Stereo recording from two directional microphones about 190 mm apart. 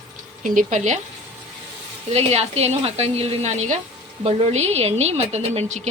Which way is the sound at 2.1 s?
35° right (ahead or behind).